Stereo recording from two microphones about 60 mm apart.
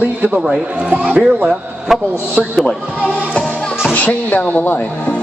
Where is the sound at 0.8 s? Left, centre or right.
Right.